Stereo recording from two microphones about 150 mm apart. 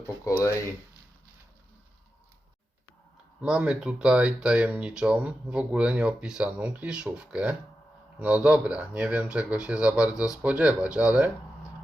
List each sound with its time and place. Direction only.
3.4 s speech: 5° right (ahead or behind)